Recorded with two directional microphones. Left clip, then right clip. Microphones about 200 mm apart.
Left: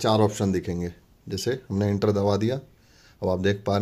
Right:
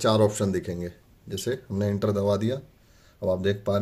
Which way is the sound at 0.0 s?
35° left (ahead or behind).